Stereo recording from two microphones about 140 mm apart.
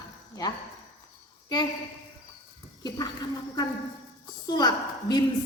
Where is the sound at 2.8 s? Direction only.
30° left (ahead or behind).